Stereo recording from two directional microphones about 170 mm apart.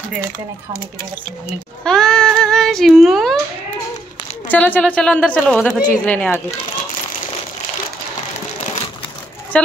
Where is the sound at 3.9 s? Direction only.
40° left (ahead or behind).